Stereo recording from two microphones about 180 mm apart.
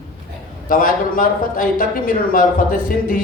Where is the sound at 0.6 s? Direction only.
50° left (ahead or behind).